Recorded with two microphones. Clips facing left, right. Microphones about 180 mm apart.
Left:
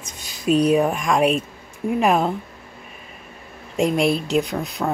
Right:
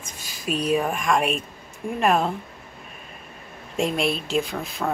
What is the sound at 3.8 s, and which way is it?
Speech, 20° left (ahead or behind).